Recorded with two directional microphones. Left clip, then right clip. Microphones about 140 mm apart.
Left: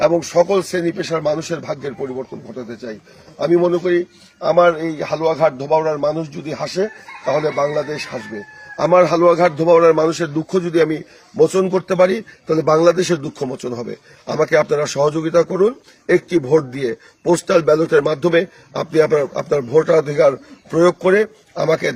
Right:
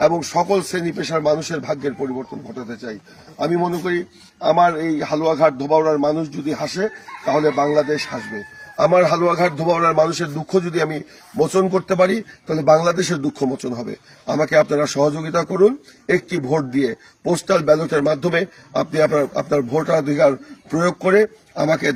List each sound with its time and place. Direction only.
0.0 s speech: 25° left (ahead or behind)